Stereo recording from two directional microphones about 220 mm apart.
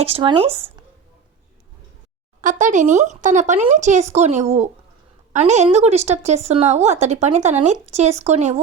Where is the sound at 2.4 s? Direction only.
35° right (ahead or behind).